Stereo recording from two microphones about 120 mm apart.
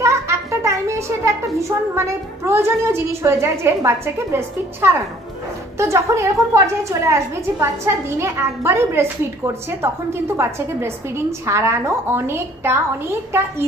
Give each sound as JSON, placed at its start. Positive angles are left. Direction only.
{"t": 0.0, "sound": "a sound", "side_deg": -25}
{"t": 1.6, "sound": "a woman's voice", "side_deg": -25}
{"t": 10.3, "sound": "a woman's voice", "side_deg": -20}